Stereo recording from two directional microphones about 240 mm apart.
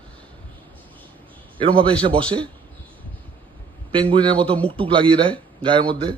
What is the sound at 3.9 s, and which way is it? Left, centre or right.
A man's voice, right.